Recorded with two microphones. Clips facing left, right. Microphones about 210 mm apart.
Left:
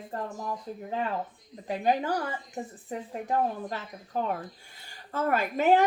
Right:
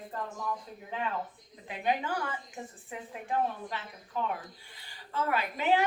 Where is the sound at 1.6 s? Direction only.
40° left (ahead or behind).